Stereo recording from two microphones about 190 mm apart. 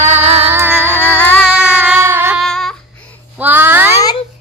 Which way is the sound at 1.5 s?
5° right (ahead or behind).